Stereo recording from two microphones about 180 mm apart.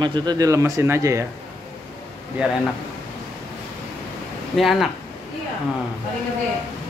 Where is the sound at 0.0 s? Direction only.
25° right (ahead or behind).